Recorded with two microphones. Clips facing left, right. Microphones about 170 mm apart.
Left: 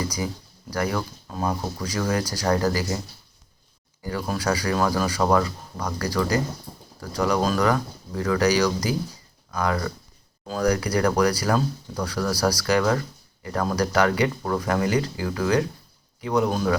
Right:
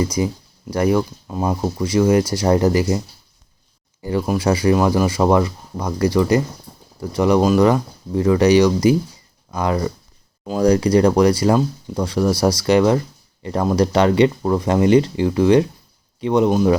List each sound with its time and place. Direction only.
0.0 s speech: 25° right (ahead or behind)
4.4 s speech: 25° right (ahead or behind)